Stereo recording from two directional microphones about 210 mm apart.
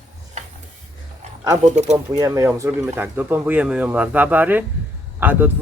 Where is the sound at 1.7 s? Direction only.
35° right (ahead or behind).